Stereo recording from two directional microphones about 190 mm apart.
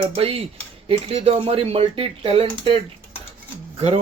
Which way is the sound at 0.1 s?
30° right (ahead or behind).